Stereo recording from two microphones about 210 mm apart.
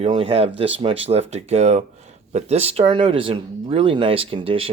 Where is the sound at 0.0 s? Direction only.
25° right (ahead or behind).